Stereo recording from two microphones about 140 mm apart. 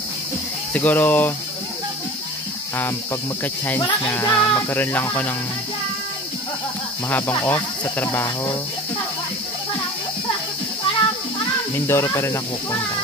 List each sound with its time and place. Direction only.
0.7 s speech: 10° left (ahead or behind)
4.1 s speech: 20° left (ahead or behind)
7.1 s speech: 15° left (ahead or behind)
11.7 s speech: 20° left (ahead or behind)